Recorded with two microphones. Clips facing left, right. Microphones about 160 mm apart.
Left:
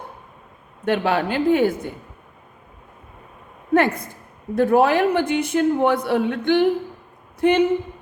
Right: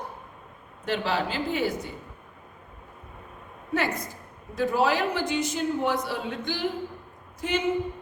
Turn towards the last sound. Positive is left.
turn(degrees=60)  # may be behind; listen again after turning